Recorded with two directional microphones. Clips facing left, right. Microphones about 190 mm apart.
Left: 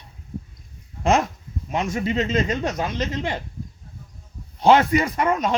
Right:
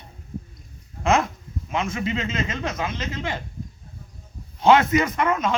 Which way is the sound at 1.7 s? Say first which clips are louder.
Left 2 dB; 40° left (ahead or behind).